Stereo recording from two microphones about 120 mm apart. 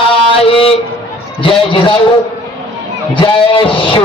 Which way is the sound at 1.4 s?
45° left (ahead or behind).